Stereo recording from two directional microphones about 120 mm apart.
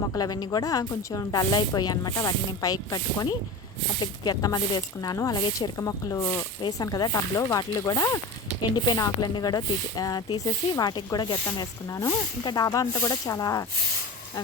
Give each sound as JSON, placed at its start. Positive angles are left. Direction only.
{"t": 0.1, "sound": "speech", "side_deg": 30}
{"t": 4.4, "sound": "speech", "side_deg": 30}